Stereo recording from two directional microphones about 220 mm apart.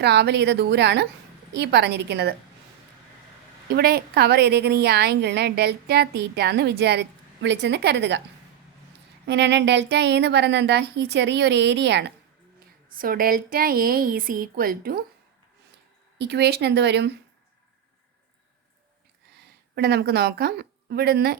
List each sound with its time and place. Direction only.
0.0 s a woman's voice: 50° right (ahead or behind)
3.7 s a woman's voice: 45° right (ahead or behind)
9.2 s a woman's voice: 50° right (ahead or behind)
16.1 s a woman's voice: 50° right (ahead or behind)
19.4 s a woman's voice: 45° right (ahead or behind)